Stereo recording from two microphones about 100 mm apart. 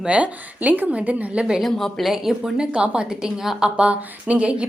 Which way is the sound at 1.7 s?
5° left (ahead or behind).